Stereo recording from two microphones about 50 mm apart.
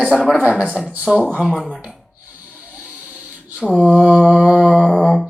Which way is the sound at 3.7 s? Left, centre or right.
Right.